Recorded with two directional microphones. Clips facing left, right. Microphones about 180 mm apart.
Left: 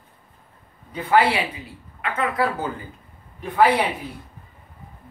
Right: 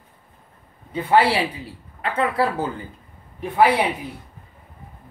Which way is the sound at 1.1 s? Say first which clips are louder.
Right 1 dB; 30° right (ahead or behind).